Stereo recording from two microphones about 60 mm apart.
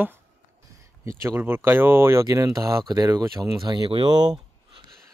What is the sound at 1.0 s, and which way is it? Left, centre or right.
Speech, right.